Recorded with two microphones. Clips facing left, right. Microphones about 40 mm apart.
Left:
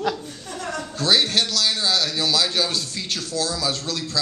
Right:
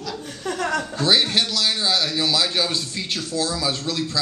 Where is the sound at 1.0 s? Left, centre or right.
Centre.